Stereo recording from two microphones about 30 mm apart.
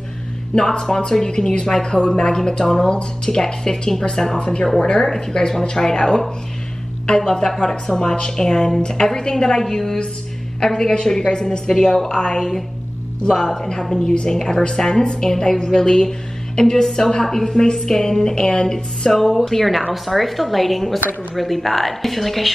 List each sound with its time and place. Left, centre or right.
0.6 s speech: centre
12.4 s a woman's voice: centre
19.3 s a woman's voice: centre